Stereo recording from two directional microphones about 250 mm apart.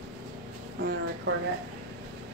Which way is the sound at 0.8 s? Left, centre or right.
Right.